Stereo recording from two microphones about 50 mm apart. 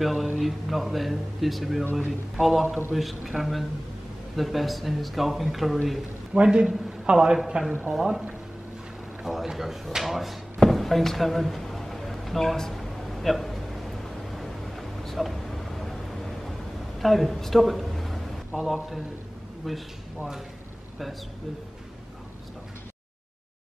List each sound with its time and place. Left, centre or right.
0.0 s speech: centre
6.3 s a man's voice: centre
9.2 s a sound: centre
17.0 s a man's voice: centre